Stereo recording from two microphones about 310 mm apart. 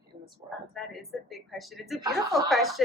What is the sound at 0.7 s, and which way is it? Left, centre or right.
A woman's voice, centre.